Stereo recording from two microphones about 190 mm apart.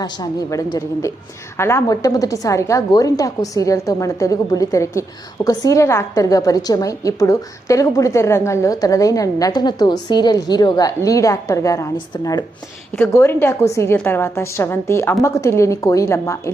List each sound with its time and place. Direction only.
0.0 s a woman's voice: 20° left (ahead or behind)